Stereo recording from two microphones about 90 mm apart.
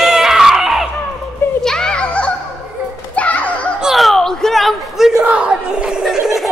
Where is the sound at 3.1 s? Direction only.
15° left (ahead or behind).